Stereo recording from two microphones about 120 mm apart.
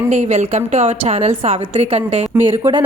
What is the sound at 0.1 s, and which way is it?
A woman's voice, 75° right (ahead or behind).